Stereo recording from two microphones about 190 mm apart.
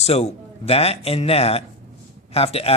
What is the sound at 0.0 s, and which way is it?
Speech, 35° left (ahead or behind).